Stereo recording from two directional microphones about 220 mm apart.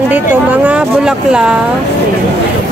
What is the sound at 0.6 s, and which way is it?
Speech, 5° right (ahead or behind).